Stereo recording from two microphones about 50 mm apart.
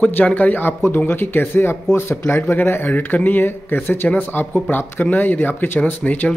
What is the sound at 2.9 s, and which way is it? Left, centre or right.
Speech, left.